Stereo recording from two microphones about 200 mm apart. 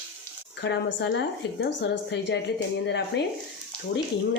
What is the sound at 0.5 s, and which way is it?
A woman's voice, 60° left (ahead or behind).